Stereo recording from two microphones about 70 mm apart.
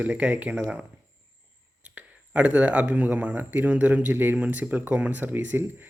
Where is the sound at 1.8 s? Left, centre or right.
Right.